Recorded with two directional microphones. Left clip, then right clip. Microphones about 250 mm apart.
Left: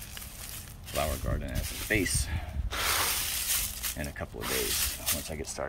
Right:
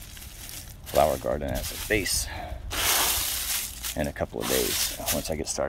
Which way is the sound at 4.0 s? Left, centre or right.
Right.